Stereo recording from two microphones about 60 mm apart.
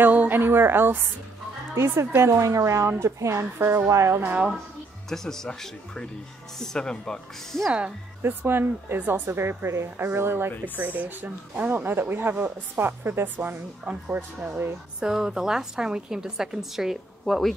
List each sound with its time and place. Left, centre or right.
0.0 s a sound: right
0.4 s a woman's voice: right
1.8 s speech: right
2.9 s speech: right
3.5 s speech: right
3.9 s speech: right
4.2 s speech: right
5.1 s speech: centre
8.2 s a woman's voice: right
10.8 s a woman's voice: right
13.8 s speech: right
15.0 s a woman's voice: centre